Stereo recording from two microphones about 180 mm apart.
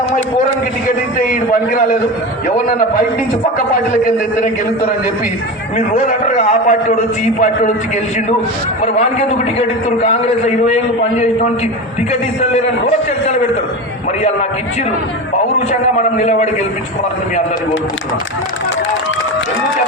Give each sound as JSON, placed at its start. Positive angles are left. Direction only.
{"t": 0.9, "sound": "a man's voice", "side_deg": 50}
{"t": 5.7, "sound": "a man's voice", "side_deg": 40}
{"t": 8.8, "sound": "a man's voice", "side_deg": 40}
{"t": 15.7, "sound": "a man's voice", "side_deg": 40}